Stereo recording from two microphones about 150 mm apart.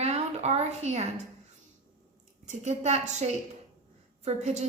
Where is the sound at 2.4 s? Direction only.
50° right (ahead or behind).